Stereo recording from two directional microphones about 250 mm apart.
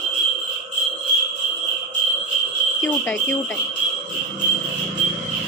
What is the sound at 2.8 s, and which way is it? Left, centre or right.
Speech, centre.